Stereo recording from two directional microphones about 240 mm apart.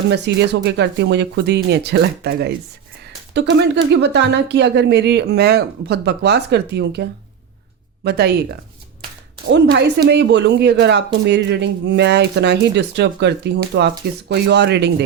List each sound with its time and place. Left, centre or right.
0.1 s speech: right
10.1 s speech: right